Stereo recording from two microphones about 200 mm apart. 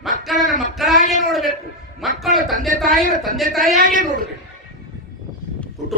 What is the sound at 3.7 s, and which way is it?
Speech, 45° right (ahead or behind).